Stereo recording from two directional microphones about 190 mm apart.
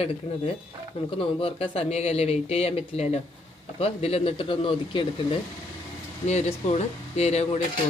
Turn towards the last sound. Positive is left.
turn(degrees=35)  # may be behind; listen again after turning